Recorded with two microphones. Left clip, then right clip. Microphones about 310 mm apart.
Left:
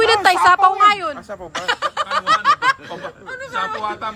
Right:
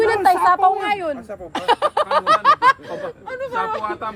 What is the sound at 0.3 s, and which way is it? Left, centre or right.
Speech, centre.